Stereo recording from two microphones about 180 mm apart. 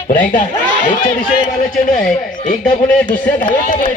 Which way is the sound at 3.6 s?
45° left (ahead or behind).